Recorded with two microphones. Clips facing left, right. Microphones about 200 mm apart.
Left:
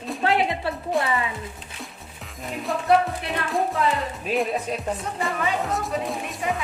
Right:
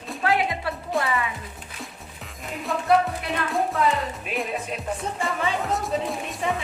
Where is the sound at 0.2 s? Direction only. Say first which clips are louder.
Left 1 dB; 25° left (ahead or behind).